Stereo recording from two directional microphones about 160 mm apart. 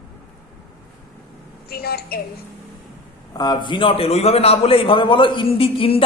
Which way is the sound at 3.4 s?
25° left (ahead or behind).